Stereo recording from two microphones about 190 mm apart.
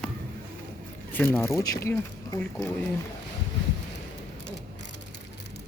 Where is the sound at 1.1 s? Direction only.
10° left (ahead or behind).